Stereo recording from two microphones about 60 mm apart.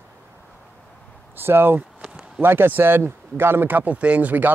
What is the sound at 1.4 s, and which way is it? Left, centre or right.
Speech, right.